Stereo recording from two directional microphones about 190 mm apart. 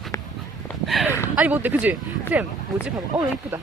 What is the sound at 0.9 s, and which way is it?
Speech, centre (ahead or behind).